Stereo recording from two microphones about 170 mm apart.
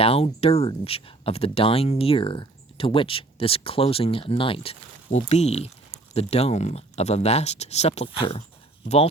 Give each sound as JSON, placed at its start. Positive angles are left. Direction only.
{"t": 0.0, "sound": "speech", "side_deg": 35}